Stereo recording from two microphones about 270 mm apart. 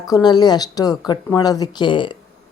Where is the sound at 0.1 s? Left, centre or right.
Centre.